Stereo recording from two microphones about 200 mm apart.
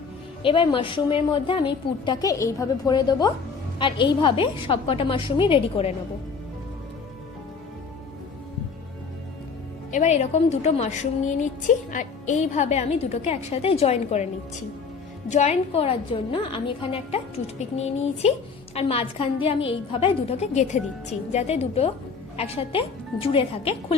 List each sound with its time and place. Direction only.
0.4 s a woman's voice: 25° left (ahead or behind)
9.9 s a woman's voice: 35° left (ahead or behind)
15.3 s a woman's voice: 35° left (ahead or behind)